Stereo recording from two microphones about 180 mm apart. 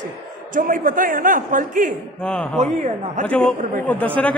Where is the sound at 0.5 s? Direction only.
50° right (ahead or behind).